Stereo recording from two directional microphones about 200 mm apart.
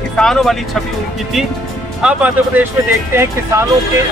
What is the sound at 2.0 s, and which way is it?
Speech, 5° right (ahead or behind).